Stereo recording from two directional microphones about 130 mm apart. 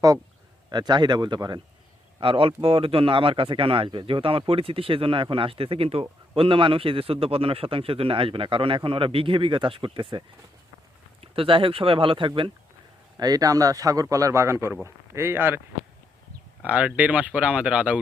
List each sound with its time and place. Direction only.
0.7 s speech: 35° right (ahead or behind)
2.2 s speech: 45° right (ahead or behind)
13.1 s speech: 30° right (ahead or behind)
16.6 s speech: 10° right (ahead or behind)